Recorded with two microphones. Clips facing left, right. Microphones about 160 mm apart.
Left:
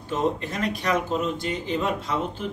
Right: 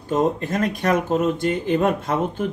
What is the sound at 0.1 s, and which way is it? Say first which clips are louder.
Speech: right 5 dB; 45° right (ahead or behind).